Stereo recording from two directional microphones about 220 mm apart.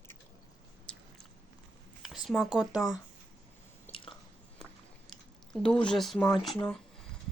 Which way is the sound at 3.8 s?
25° left (ahead or behind).